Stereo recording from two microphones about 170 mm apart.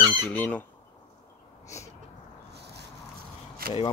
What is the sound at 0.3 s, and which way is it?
Speech, 10° left (ahead or behind).